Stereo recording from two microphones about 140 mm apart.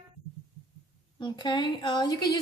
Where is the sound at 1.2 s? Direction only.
35° left (ahead or behind).